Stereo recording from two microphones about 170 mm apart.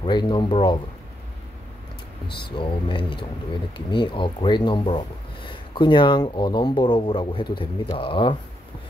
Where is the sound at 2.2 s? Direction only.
70° left (ahead or behind).